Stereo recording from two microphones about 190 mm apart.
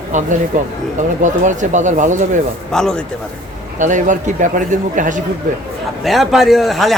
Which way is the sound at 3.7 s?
40° right (ahead or behind).